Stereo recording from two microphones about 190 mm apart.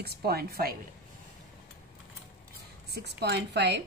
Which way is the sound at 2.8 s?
60° right (ahead or behind).